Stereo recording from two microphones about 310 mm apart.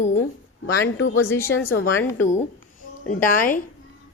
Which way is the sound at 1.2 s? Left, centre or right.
Centre.